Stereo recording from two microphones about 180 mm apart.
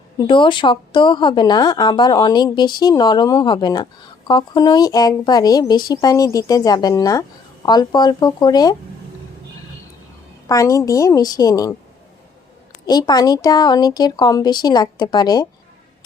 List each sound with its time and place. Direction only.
0.2 s a woman's voice: 25° left (ahead or behind)
10.4 s a woman's voice: 20° left (ahead or behind)
12.8 s a woman's voice: 20° left (ahead or behind)